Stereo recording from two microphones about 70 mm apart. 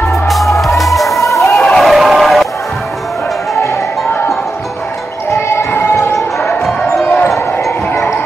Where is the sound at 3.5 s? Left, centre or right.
Left.